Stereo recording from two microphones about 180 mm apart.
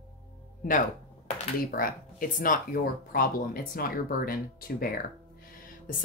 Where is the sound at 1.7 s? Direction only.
50° left (ahead or behind).